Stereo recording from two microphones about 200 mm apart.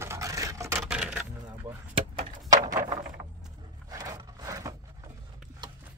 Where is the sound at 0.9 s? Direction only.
5° right (ahead or behind).